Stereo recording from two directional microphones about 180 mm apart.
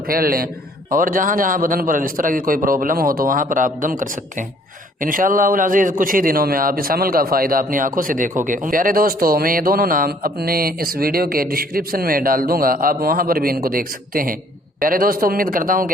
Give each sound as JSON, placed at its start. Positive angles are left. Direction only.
{"t": 0.1, "sound": "a man's voice", "side_deg": -55}